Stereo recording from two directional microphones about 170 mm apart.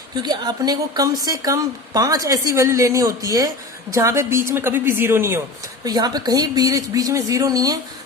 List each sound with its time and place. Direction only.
0.2 s a woman's voice: 25° right (ahead or behind)